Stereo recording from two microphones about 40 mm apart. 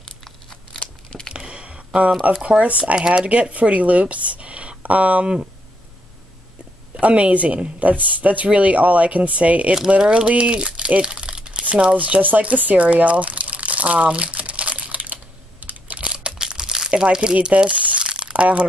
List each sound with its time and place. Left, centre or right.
1.3 s a sound: right
2.4 s speech: right
3.0 s speech: centre
3.3 s speech: right
7.0 s speech: right
7.8 s speech: right
9.8 s speech: right
12.0 s crumpling: right
16.0 s crumpling: right
17.0 s speech: centre
18.0 s crumpling: right